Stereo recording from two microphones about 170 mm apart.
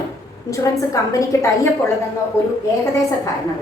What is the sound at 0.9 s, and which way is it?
Speech, 20° left (ahead or behind).